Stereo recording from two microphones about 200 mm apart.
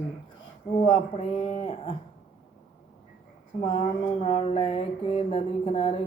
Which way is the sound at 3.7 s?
30° left (ahead or behind).